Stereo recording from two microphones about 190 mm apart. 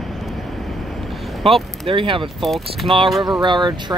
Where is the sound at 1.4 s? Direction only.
30° right (ahead or behind).